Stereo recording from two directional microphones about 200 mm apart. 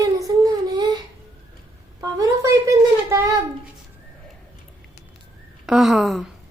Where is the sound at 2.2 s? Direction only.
15° right (ahead or behind).